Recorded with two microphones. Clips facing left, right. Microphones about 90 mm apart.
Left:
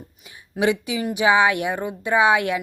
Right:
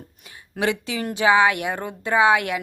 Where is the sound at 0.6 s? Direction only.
20° left (ahead or behind).